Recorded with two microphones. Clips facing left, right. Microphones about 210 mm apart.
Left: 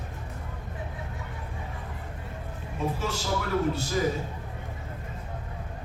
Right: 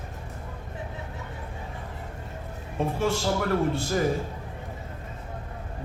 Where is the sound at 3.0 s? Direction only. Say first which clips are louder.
Right 5 dB; 50° right (ahead or behind).